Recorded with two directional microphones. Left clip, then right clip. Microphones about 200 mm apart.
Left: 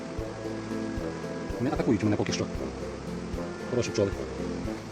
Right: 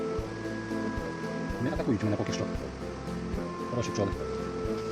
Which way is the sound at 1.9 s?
50° left (ahead or behind).